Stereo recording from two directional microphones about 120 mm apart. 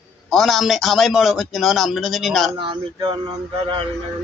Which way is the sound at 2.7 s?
40° right (ahead or behind).